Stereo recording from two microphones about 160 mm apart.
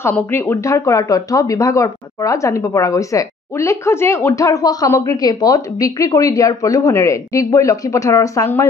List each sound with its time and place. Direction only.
0.0 s speech: 15° left (ahead or behind)